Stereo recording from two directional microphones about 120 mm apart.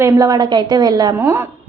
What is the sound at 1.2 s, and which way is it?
Speech, 20° right (ahead or behind).